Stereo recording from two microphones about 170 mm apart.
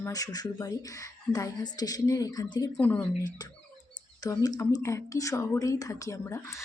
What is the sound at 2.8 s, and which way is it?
Speech, 10° left (ahead or behind).